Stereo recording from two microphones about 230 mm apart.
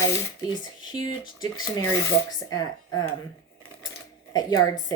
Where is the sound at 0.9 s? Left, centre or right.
Centre.